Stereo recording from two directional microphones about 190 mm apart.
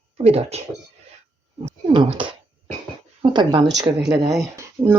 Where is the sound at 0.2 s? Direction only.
35° right (ahead or behind).